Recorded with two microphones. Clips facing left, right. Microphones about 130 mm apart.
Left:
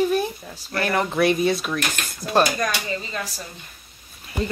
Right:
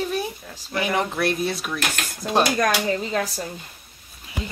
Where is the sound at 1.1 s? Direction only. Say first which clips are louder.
Left 4 dB; centre (ahead or behind).